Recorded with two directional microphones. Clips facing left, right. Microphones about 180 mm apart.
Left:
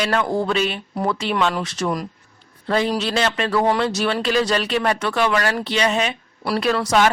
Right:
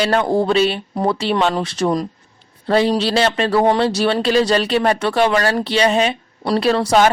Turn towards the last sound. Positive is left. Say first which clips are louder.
# right 4 dB
turn(degrees=-30)  # may be behind; listen again after turning